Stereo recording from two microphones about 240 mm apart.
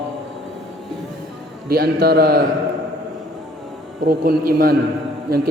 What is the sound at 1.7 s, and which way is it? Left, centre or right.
Speech, right.